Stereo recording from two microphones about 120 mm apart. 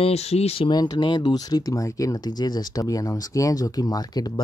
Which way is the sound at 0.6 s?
35° left (ahead or behind).